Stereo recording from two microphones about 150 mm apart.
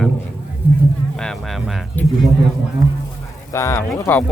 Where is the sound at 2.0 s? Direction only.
10° left (ahead or behind).